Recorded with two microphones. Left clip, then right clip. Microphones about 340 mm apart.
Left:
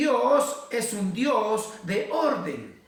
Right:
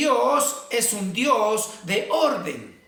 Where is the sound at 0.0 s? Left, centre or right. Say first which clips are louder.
Right 2 dB; centre.